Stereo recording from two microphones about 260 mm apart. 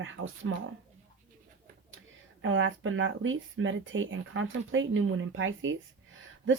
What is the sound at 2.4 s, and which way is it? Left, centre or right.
Speech, right.